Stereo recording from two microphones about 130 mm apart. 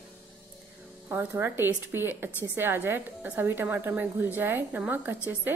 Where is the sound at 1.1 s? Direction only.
15° right (ahead or behind).